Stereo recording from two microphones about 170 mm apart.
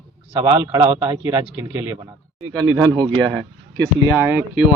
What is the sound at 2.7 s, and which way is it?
Speech, 10° right (ahead or behind).